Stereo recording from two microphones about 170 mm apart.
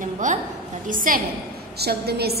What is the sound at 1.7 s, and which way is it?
Speech, 70° right (ahead or behind).